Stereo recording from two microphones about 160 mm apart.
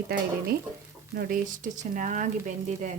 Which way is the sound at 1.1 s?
60° right (ahead or behind).